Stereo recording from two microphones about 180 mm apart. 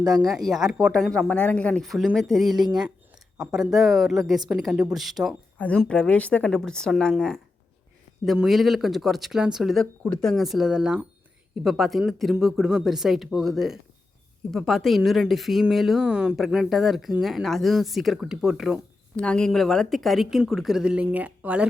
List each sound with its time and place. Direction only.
0.0 s speech: 20° right (ahead or behind)
0.6 s a woman's voice: 5° right (ahead or behind)